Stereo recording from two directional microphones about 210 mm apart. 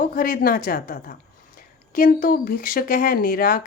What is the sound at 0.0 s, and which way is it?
A woman's voice, 40° left (ahead or behind).